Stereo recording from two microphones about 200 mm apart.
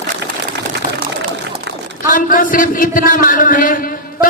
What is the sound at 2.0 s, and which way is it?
A man's voice, 40° left (ahead or behind).